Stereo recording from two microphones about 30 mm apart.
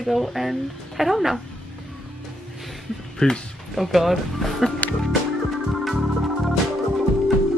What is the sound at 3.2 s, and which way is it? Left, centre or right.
Speech, left.